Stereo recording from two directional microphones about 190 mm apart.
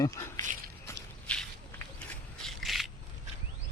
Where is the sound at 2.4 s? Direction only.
Centre (ahead or behind).